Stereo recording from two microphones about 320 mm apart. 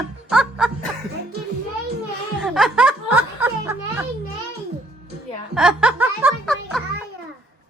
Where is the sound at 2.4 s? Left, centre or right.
Centre.